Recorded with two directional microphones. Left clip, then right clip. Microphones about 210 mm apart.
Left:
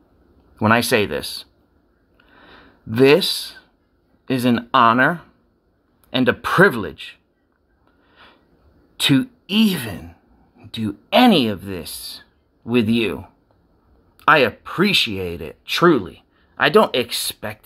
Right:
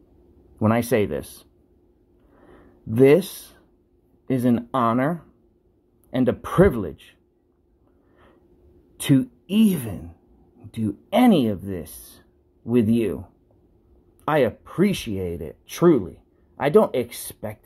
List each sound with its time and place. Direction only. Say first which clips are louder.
0.6 s speech: left 5 dB; 5° left (ahead or behind)
2.3 s a sound: left 5 dB; centre (ahead or behind)
4.3 s speech: left 4 dB; 10° left (ahead or behind)
8.9 s speech: left 4 dB; 5° left (ahead or behind)
14.2 s speech: left 7 dB; 5° left (ahead or behind)